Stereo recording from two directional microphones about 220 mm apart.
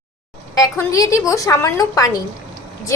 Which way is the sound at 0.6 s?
15° left (ahead or behind).